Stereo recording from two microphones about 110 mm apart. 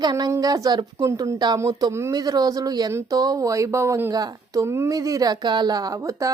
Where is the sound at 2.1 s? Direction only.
35° right (ahead or behind).